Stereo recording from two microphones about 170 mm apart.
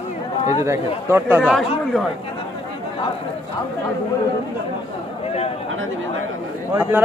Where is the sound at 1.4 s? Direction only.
5° left (ahead or behind).